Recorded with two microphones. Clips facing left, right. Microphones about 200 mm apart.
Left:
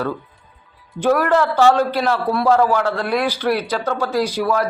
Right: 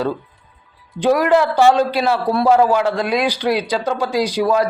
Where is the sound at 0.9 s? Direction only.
15° right (ahead or behind).